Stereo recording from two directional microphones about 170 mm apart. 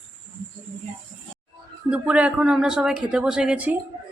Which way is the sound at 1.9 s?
5° right (ahead or behind).